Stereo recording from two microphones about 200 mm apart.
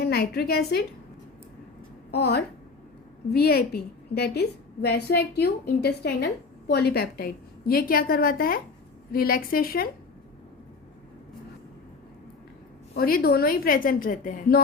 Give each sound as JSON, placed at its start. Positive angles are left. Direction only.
{"t": 0.0, "sound": "a woman's voice", "side_deg": 50}
{"t": 2.0, "sound": "a woman's voice", "side_deg": 55}
{"t": 12.9, "sound": "a woman's voice", "side_deg": 50}